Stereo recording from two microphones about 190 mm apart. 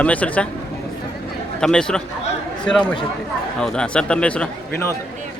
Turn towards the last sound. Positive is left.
turn(degrees=10)  # may be behind; listen again after turning